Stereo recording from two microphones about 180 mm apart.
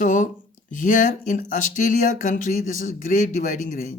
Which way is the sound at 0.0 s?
45° left (ahead or behind).